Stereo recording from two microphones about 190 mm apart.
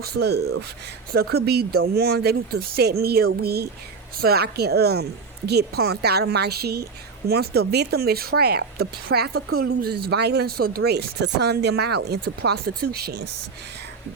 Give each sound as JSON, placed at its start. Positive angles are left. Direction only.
{"t": 0.0, "sound": "speech", "side_deg": -55}
{"t": 9.6, "sound": "speech", "side_deg": -55}